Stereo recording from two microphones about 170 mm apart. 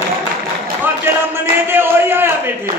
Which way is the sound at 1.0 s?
15° right (ahead or behind).